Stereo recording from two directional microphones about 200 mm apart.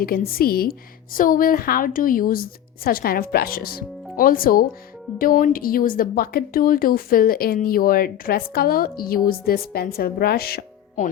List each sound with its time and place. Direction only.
0.0 s a woman's voice: 50° left (ahead or behind)